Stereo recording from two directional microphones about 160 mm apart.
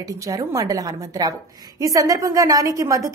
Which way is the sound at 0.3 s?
20° right (ahead or behind).